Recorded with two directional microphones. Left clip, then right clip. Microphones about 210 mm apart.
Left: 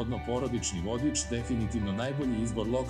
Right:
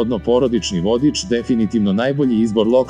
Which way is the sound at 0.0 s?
45° right (ahead or behind).